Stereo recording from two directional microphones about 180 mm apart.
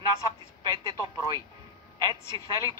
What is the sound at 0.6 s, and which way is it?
Speech, 25° right (ahead or behind).